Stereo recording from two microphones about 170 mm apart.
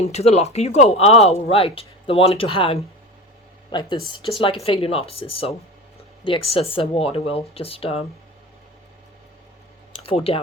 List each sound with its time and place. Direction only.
0.0 s speech: 40° left (ahead or behind)
10.0 s speech: 35° left (ahead or behind)